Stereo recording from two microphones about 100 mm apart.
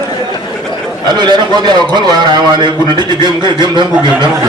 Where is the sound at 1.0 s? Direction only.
45° right (ahead or behind).